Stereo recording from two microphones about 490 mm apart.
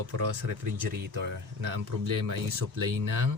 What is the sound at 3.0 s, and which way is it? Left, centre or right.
Speech, right.